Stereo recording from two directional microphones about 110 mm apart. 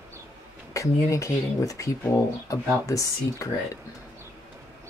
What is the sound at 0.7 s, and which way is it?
Speech, 30° left (ahead or behind).